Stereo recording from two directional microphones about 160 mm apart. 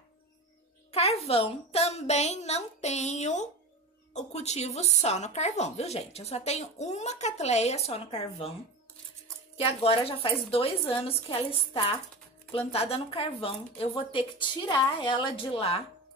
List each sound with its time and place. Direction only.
0.9 s speech: 40° left (ahead or behind)
9.6 s a woman's voice: 35° left (ahead or behind)